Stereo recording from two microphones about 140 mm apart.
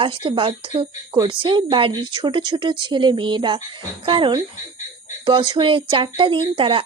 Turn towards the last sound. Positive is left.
turn(degrees=-35)  # may be behind; listen again after turning